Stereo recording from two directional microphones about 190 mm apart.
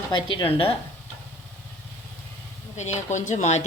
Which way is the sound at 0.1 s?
25° left (ahead or behind).